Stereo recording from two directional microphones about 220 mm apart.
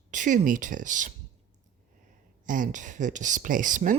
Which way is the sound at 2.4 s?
35° right (ahead or behind).